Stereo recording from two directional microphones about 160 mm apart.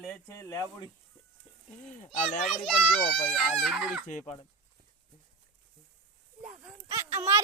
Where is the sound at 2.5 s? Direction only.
Centre (ahead or behind).